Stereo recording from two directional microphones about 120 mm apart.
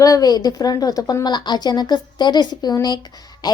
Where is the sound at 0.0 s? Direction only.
30° left (ahead or behind).